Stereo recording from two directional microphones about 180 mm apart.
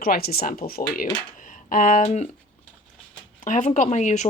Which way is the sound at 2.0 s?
40° left (ahead or behind).